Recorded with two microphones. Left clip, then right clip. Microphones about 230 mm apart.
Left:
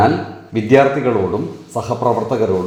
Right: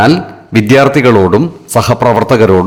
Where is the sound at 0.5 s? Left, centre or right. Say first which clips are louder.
Right 5 dB; right.